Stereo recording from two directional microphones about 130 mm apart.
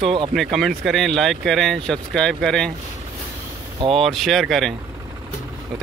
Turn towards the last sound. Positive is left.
turn(degrees=0)  # may be behind; listen again after turning